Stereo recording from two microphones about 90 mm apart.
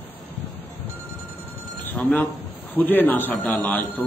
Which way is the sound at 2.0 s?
15° left (ahead or behind).